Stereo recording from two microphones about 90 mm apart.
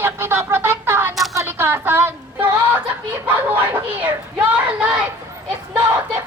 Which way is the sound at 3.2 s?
20° right (ahead or behind).